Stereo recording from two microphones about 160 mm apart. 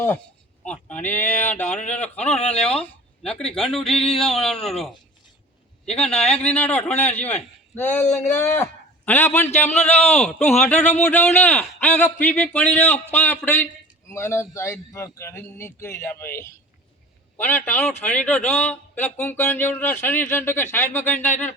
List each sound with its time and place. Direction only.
0.6 s a man's voice: 10° left (ahead or behind)
6.0 s a man's voice: 5° left (ahead or behind)